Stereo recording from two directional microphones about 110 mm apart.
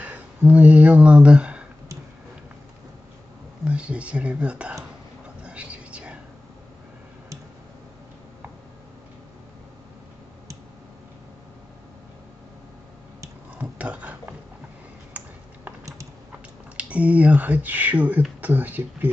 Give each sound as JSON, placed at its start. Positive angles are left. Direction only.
{"t": 0.0, "sound": "speech", "side_deg": -15}
{"t": 3.6, "sound": "speech", "side_deg": -10}
{"t": 5.4, "sound": "a sound", "side_deg": -10}
{"t": 13.6, "sound": "a sound", "side_deg": -10}
{"t": 15.2, "sound": "typing", "side_deg": -15}
{"t": 16.7, "sound": "speech", "side_deg": -10}